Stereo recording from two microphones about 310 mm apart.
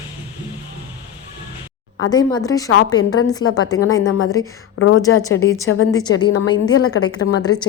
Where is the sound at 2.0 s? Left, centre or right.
Centre.